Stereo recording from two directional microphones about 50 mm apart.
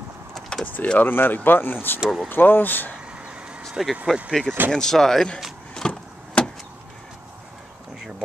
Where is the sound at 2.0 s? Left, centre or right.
Centre.